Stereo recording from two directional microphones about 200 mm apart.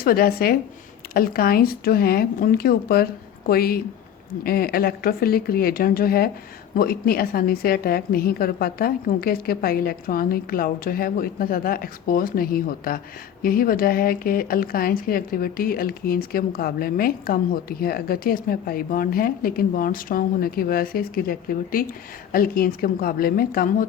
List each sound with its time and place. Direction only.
0.0 s speech: 50° left (ahead or behind)